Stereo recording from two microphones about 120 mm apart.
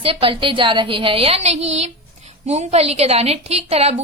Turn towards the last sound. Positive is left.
turn(degrees=-60)  # may be behind; listen again after turning